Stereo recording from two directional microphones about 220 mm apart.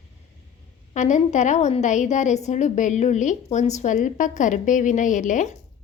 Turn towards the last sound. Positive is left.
turn(degrees=35)  # may be behind; listen again after turning